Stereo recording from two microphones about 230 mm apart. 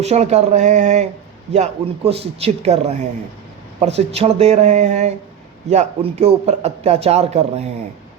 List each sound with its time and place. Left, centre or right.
0.0 s speech: right